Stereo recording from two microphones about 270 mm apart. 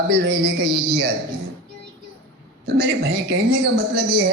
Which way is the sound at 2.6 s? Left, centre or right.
Right.